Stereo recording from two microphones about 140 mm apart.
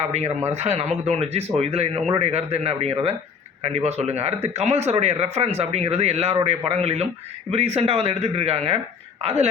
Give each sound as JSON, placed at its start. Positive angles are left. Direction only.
{"t": 0.1, "sound": "speech", "side_deg": -55}